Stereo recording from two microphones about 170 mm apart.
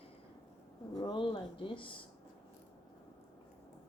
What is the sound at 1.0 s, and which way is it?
Speech, 25° left (ahead or behind).